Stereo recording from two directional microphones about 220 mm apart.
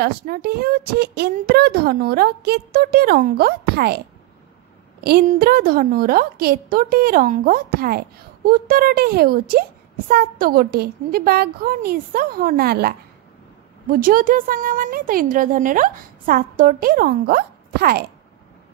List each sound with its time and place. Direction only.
0.0 s a woman's voice: 45° right (ahead or behind)
5.0 s a woman's voice: 45° right (ahead or behind)